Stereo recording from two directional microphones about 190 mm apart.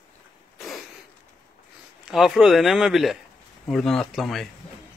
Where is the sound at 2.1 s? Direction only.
Centre (ahead or behind).